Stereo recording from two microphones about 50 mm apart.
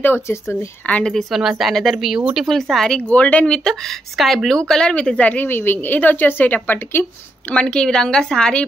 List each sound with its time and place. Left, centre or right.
0.3 s speech: left
1.3 s speech: centre
2.0 s speech: centre
2.4 s speech: centre
3.1 s speech: left; by 4.6 s centre
4.6 s speech: centre
5.5 s speech: left
7.5 s speech: centre